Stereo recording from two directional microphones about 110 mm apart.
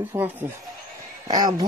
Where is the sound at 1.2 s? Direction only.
35° right (ahead or behind).